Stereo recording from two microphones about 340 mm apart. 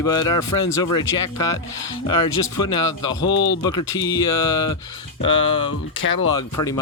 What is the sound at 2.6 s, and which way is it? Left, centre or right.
Speech, centre.